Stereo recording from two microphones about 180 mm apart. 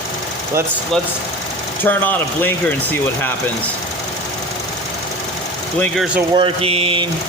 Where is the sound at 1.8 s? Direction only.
10° left (ahead or behind).